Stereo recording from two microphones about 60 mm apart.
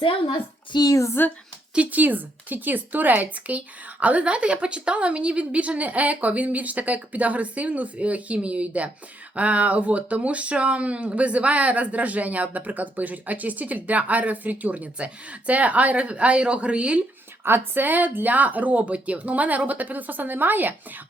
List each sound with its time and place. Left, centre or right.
0.8 s a woman's voice: left
1.7 s speech: right
17.4 s speech: right